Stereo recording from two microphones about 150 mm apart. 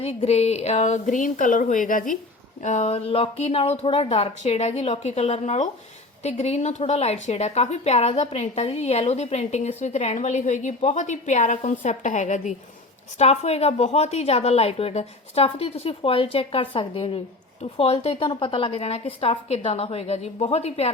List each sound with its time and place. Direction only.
0.0 s a woman's voice: 45° left (ahead or behind); by 2.1 s 65° left (ahead or behind)
2.6 s a woman's voice: 50° left (ahead or behind)
18.2 s a woman's voice: 35° left (ahead or behind)